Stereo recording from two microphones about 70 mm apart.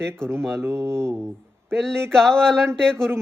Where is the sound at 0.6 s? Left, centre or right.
Right.